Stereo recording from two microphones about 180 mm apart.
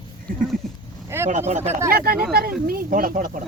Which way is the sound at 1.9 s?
55° right (ahead or behind).